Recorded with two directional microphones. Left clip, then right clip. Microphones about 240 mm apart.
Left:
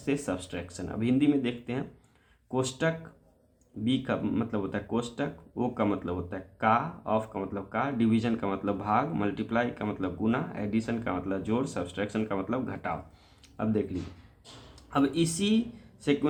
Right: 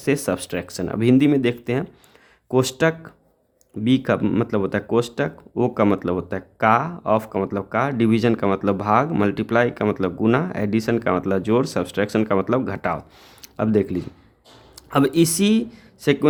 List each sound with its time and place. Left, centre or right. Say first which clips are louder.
0.0 s speech: right 10 dB; right
13.4 s a sound: right 10 dB; right
14.8 s speech: right 9 dB; right